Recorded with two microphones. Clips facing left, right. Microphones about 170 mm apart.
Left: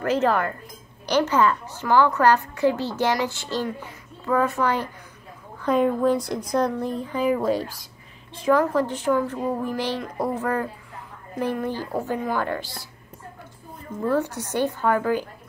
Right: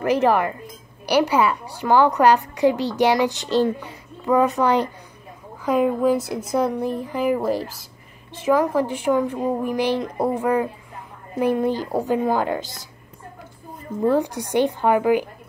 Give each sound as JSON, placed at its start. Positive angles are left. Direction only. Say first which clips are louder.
{"t": 0.0, "sound": "a woman's voice", "louder": "right 3 dB", "side_deg": -15}
{"t": 5.6, "sound": "a woman's voice", "louder": "right 1 dB", "side_deg": -5}
{"t": 8.5, "sound": "a woman's voice", "louder": "right 1 dB", "side_deg": -10}
{"t": 14.0, "sound": "a woman's voice", "louder": "right 4 dB", "side_deg": -15}